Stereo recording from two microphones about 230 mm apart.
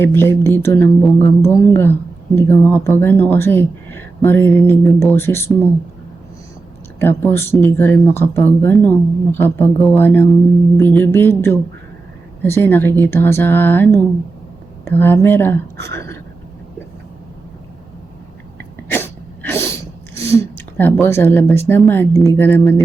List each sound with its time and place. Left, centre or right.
0.0 s speech: centre
7.0 s speech: centre
18.9 s sneeze: centre
22.4 s speech: centre